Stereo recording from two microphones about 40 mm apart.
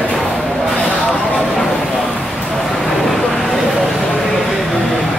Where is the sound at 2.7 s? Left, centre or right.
Centre.